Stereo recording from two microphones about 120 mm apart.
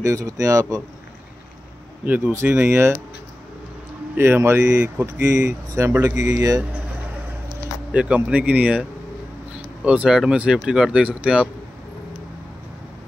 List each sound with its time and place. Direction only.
0.0 s speech: 25° right (ahead or behind)
2.0 s speech: 15° right (ahead or behind)
4.2 s speech: 20° right (ahead or behind)
7.9 s speech: 10° right (ahead or behind)
9.8 s speech: 10° right (ahead or behind)